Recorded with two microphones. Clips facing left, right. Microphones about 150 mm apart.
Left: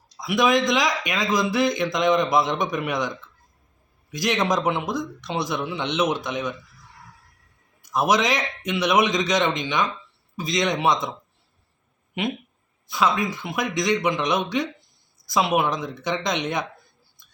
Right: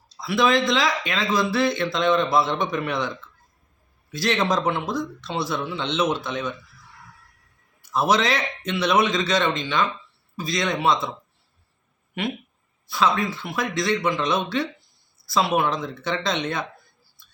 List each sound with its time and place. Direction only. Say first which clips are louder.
0.1 s a man's voice: even; 15° left (ahead or behind)
7.9 s a man's voice: even; 15° left (ahead or behind)
12.1 s a man's voice: left 1 dB; 20° left (ahead or behind)